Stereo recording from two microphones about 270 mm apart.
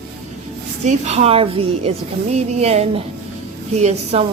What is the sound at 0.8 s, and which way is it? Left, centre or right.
Speech, right.